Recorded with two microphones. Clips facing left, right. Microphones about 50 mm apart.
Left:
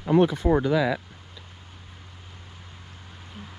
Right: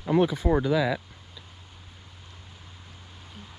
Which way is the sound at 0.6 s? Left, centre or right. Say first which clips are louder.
Left 2 dB; left.